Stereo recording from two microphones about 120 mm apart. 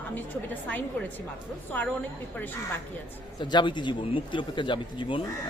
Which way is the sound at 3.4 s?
40° left (ahead or behind).